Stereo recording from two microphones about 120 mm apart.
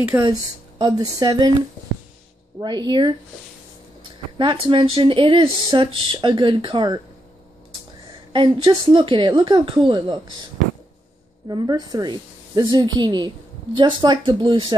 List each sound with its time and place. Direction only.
0.2 s a woman's voice: 35° right (ahead or behind)
2.6 s a woman's voice: 40° right (ahead or behind)
8.3 s speech: 40° right (ahead or behind)
11.4 s a woman's voice: 35° right (ahead or behind)